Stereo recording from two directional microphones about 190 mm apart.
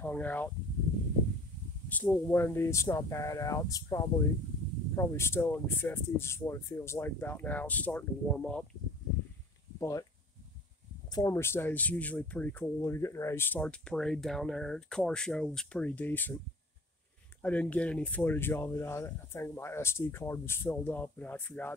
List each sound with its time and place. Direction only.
0.0 s speech: 10° left (ahead or behind)
1.9 s speech: 10° left (ahead or behind)
9.8 s speech: 15° left (ahead or behind)
11.1 s speech: 20° left (ahead or behind)
17.4 s speech: 10° left (ahead or behind)